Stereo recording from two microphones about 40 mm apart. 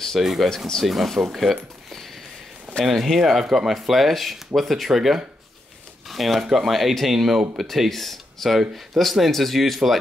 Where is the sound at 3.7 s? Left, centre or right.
Centre.